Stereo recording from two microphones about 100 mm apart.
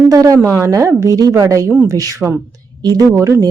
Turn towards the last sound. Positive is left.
turn(degrees=-30)  # may be behind; listen again after turning